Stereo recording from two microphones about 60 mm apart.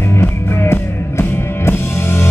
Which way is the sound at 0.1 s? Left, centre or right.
Left.